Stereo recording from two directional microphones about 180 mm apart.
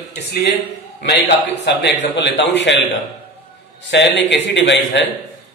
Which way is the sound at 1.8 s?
75° left (ahead or behind).